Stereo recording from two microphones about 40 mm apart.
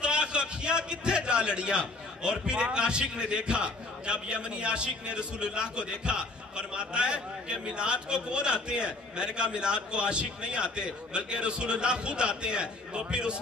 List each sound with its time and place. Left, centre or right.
0.0 s a man's voice: right